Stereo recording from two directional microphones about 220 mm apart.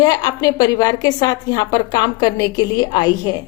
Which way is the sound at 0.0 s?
20° left (ahead or behind).